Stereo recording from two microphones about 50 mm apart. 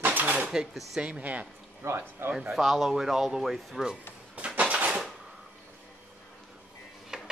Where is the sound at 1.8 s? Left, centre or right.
Right.